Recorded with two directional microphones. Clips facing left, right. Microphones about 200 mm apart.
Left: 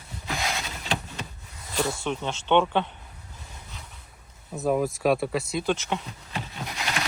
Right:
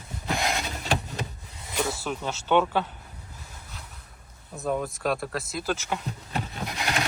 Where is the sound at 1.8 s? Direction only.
5° right (ahead or behind).